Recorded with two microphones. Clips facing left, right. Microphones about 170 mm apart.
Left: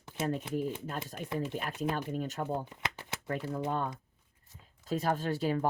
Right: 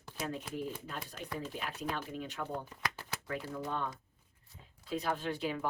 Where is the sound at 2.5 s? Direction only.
20° left (ahead or behind).